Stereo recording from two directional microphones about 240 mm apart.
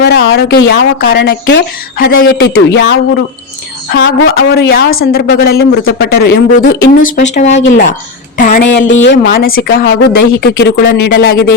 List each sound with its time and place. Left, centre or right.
0.0 s speech: left
4.5 s a woman's voice: left
7.2 s a woman's voice: left
8.9 s speech: left
9.2 s a woman's voice: left